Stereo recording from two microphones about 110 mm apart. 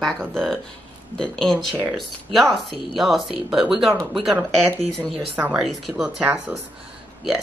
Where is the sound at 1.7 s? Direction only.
15° right (ahead or behind).